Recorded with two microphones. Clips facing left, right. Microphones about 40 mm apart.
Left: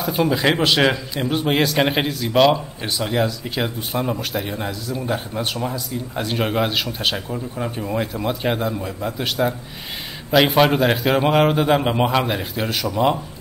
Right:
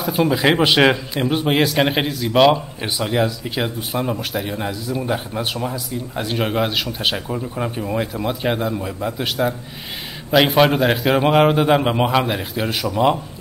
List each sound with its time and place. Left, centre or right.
0.0 s a man's voice: centre
0.6 s a man's voice: centre